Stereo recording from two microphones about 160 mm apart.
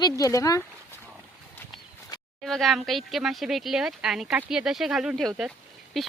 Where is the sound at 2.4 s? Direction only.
Centre (ahead or behind).